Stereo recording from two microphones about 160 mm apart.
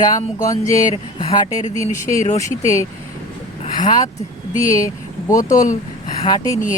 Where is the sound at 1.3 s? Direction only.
25° left (ahead or behind).